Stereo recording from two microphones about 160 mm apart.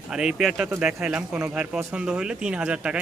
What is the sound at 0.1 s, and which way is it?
Speech, 5° right (ahead or behind).